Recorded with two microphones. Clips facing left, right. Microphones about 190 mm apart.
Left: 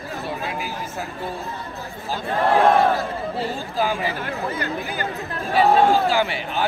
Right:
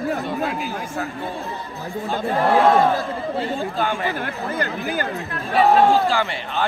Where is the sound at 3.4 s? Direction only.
Centre (ahead or behind).